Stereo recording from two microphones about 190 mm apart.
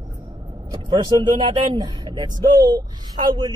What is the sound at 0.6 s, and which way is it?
Speech, 20° right (ahead or behind).